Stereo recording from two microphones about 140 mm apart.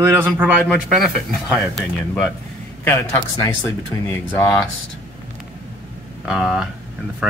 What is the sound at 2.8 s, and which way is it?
A man's voice, 20° left (ahead or behind).